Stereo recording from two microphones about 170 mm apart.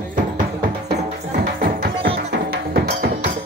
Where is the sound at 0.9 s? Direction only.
60° right (ahead or behind).